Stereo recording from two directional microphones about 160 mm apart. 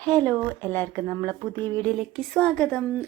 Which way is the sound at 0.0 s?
10° left (ahead or behind).